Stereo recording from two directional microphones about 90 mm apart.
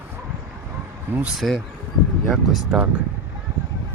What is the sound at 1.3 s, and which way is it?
Speech, centre (ahead or behind).